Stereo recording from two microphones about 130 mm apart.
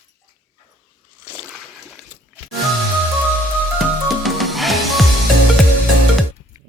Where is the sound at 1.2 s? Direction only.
15° left (ahead or behind).